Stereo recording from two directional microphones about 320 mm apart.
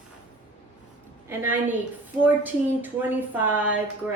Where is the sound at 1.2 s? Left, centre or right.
Centre.